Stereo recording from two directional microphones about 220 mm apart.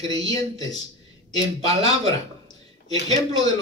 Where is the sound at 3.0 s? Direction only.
15° left (ahead or behind).